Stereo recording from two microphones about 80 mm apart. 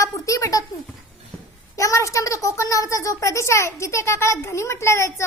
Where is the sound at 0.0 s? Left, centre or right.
Left.